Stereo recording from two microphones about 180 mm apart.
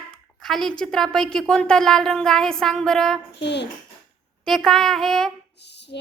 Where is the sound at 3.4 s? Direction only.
70° left (ahead or behind).